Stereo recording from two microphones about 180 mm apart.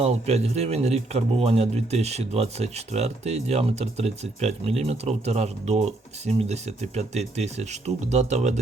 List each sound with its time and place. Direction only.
0.0 s a man's voice: 35° right (ahead or behind)